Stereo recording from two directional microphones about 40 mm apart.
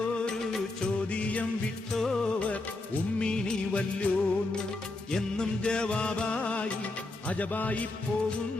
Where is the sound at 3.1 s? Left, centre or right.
Left.